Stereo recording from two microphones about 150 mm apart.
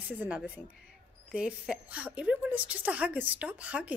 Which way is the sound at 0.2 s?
10° right (ahead or behind).